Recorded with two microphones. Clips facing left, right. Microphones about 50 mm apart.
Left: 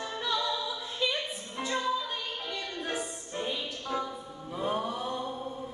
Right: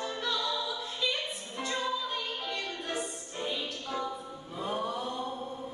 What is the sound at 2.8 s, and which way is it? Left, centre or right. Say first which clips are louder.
Music: left 1 dB; centre.